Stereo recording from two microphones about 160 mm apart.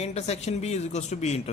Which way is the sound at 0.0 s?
40° left (ahead or behind).